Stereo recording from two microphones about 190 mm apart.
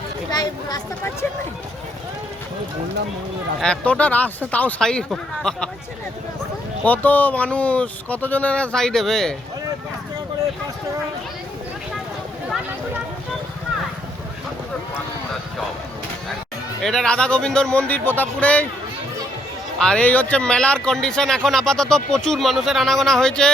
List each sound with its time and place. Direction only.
0.3 s speech: 20° left (ahead or behind)
3.6 s speech: 5° left (ahead or behind)
6.8 s speech: 10° left (ahead or behind)
16.8 s speech: 5° left (ahead or behind)
19.8 s speech: 5° left (ahead or behind)